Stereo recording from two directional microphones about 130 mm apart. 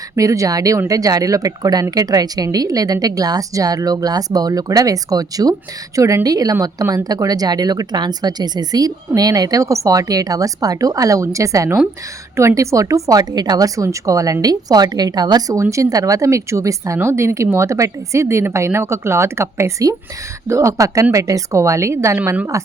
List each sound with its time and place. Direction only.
0.2 s speech: 25° right (ahead or behind)